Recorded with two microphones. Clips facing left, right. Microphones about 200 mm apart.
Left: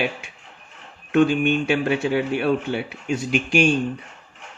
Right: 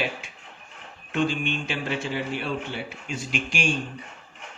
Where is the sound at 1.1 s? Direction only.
60° left (ahead or behind).